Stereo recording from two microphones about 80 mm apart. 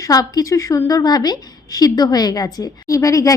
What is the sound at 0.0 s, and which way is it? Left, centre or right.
Speech, left.